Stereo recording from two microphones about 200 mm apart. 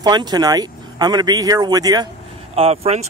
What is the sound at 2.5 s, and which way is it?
Speech, 30° right (ahead or behind).